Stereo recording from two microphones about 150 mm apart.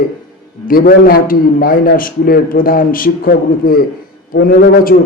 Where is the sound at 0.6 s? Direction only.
75° left (ahead or behind).